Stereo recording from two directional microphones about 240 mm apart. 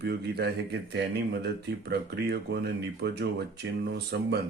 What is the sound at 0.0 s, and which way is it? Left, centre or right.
Speech, right.